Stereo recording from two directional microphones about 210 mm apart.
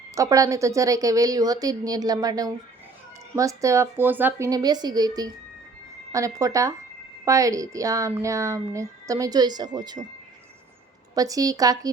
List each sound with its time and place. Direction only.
0.1 s speech: 15° right (ahead or behind)
11.1 s speech: 15° right (ahead or behind)